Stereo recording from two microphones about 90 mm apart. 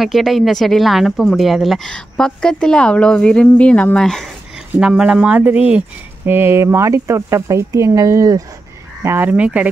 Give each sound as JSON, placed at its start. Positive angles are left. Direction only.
{"t": 0.0, "sound": "speech", "side_deg": 0}
{"t": 4.7, "sound": "speech", "side_deg": -10}
{"t": 6.2, "sound": "speech", "side_deg": -25}
{"t": 9.0, "sound": "speech", "side_deg": -25}